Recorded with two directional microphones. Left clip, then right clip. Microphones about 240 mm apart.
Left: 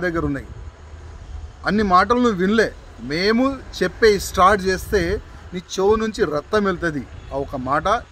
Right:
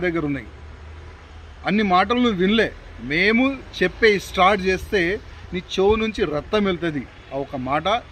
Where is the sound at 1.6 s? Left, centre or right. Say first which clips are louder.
Left 2 dB; centre.